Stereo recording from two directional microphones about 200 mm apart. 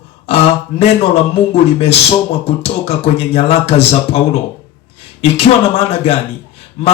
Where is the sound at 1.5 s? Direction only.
30° left (ahead or behind).